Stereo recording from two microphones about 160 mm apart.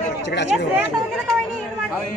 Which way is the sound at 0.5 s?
Centre (ahead or behind).